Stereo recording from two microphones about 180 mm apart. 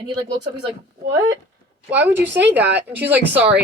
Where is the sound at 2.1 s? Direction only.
10° right (ahead or behind).